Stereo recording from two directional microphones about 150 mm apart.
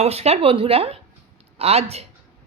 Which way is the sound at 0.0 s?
45° right (ahead or behind).